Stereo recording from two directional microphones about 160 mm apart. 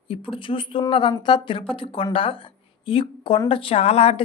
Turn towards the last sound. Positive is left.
turn(degrees=40)  # may be behind; listen again after turning